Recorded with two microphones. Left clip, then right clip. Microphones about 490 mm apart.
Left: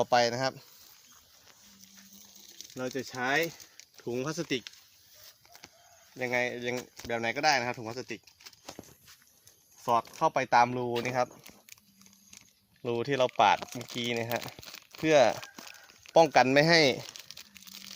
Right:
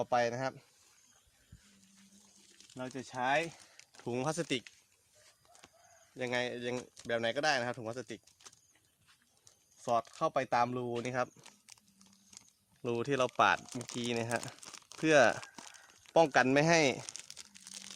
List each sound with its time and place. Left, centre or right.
0.0 s speech: right
2.7 s speech: right
4.1 s speech: right
6.1 s speech: right
9.8 s speech: right
12.8 s speech: right
17.1 s crumpling: right